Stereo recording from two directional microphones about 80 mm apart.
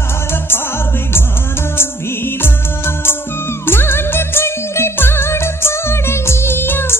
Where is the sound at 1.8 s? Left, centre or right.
Left.